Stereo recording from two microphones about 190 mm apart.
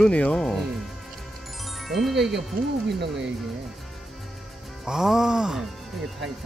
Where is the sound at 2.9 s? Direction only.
65° right (ahead or behind).